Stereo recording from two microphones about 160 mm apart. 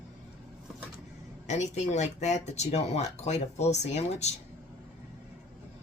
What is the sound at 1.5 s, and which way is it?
Speech, 45° left (ahead or behind).